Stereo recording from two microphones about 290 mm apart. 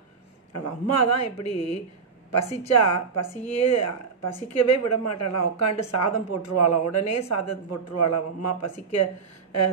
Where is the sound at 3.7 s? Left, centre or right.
Left.